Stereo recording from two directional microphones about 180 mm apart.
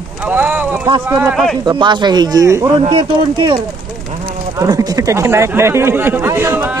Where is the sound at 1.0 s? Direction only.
10° right (ahead or behind).